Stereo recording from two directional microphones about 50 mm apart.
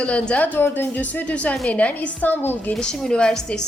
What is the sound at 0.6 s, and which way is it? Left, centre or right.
Speech, left.